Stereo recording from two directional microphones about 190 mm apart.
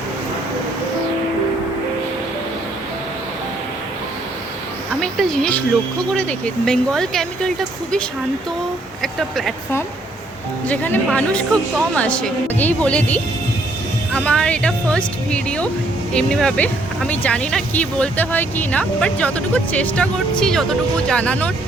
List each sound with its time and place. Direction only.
4.9 s speech: centre (ahead or behind)
10.7 s speech: 10° left (ahead or behind)